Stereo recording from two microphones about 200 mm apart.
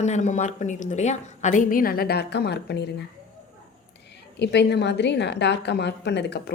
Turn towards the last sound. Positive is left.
turn(degrees=60)  # may be behind; listen again after turning